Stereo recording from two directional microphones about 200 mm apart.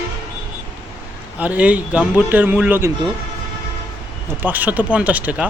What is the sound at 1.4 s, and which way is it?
Speech, 5° right (ahead or behind).